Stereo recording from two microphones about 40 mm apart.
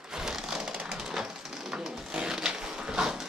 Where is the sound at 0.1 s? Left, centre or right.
Centre.